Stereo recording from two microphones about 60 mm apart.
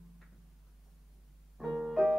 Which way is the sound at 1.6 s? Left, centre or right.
Centre.